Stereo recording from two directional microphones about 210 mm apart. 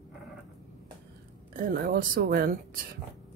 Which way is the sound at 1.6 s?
45° right (ahead or behind).